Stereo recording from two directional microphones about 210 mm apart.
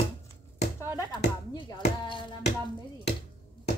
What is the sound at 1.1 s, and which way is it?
Speech, 20° left (ahead or behind).